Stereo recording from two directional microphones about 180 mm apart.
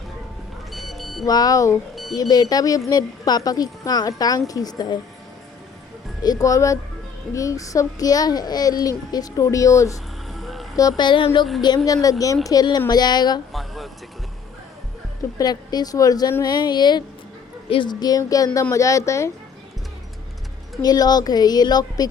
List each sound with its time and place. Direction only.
0.7 s music: centre (ahead or behind)
1.2 s a child's voice: 20° left (ahead or behind)
6.4 s a child's voice: 20° left (ahead or behind)
10.3 s vehicle: centre (ahead or behind)
10.8 s a child's voice: 20° left (ahead or behind)
13.5 s a sound: centre (ahead or behind)
15.4 s a child's voice: 20° left (ahead or behind)
20.8 s a child's voice: 20° left (ahead or behind)